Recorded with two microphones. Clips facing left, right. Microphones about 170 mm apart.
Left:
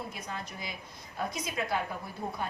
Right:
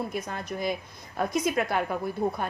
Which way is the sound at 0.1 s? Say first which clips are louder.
Right 8 dB; 55° right (ahead or behind).